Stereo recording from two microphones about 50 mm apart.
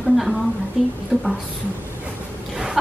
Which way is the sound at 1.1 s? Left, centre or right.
Right.